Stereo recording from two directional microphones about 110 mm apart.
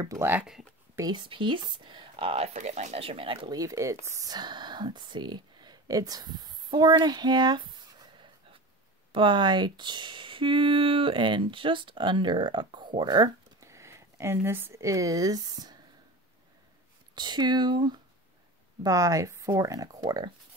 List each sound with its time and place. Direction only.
0.0 s speech: 25° right (ahead or behind)
1.1 s speech: 50° right (ahead or behind)
3.5 s speech: 30° right (ahead or behind)
4.3 s speech: 40° right (ahead or behind)
17.1 s speech: 40° right (ahead or behind)
18.8 s speech: 30° right (ahead or behind)